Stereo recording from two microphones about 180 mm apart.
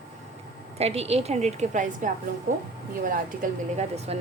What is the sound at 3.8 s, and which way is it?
Speech, 35° right (ahead or behind).